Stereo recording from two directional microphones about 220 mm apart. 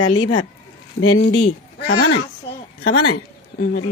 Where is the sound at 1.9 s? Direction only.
70° left (ahead or behind).